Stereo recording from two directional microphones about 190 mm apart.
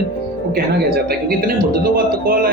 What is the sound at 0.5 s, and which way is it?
A man's voice, 55° right (ahead or behind).